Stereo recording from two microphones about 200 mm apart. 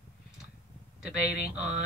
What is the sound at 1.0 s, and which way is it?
Speech, 5° right (ahead or behind).